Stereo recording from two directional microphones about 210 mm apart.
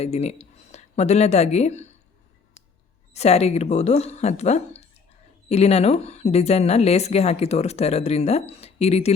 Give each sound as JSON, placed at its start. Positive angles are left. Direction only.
{"t": 0.0, "sound": "speech", "side_deg": 30}
{"t": 3.1, "sound": "a woman's voice", "side_deg": 30}